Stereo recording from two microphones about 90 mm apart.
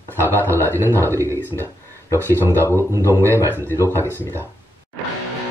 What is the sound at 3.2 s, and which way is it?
A man's voice, 25° left (ahead or behind).